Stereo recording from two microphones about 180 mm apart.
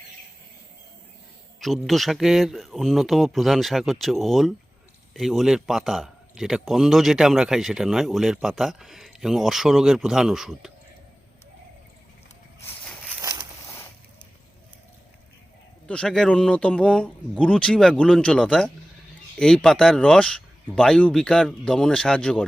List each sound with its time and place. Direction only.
1.5 s speech: centre (ahead or behind)
13.2 s a sound: 25° right (ahead or behind)
15.9 s speech: 5° left (ahead or behind)